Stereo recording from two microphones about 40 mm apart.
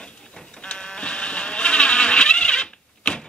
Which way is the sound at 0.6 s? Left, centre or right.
Left.